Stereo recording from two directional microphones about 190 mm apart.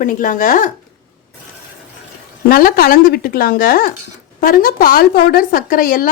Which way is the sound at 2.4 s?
50° left (ahead or behind).